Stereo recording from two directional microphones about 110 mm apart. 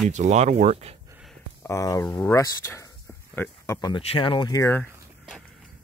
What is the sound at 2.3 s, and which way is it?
Speech, 30° left (ahead or behind).